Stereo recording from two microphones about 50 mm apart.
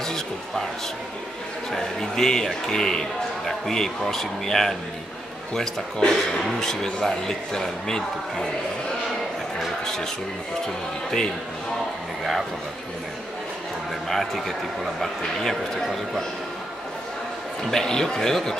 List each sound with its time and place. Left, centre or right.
0.0 s a sound: centre
1.7 s a man's voice: centre
12.2 s speech: centre
14.0 s a man's voice: centre
17.6 s a man's voice: centre